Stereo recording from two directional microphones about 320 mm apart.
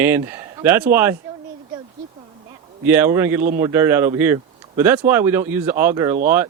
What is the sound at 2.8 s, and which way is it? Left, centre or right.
Speech, centre.